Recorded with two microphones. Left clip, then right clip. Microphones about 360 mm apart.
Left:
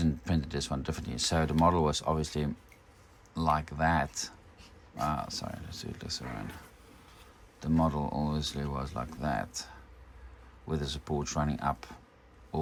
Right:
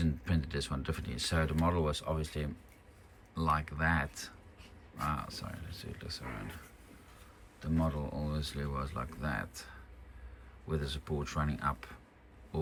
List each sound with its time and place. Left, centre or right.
0.0 s speech: centre
7.6 s speech: centre